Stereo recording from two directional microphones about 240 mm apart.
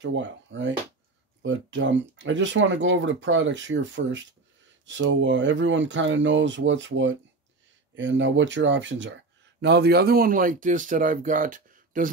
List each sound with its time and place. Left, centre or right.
0.0 s speech: right